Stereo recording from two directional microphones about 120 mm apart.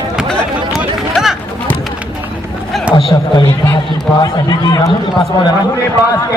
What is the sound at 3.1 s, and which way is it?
Speech, 30° left (ahead or behind).